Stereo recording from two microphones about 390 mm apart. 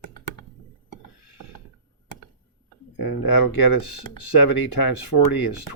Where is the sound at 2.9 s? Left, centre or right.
Left.